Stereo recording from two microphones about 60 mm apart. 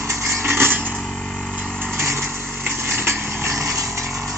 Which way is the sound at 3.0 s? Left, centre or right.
Right.